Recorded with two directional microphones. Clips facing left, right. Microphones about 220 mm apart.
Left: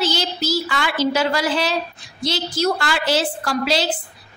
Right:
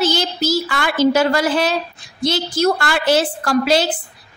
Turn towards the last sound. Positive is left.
turn(degrees=-50)  # may be behind; listen again after turning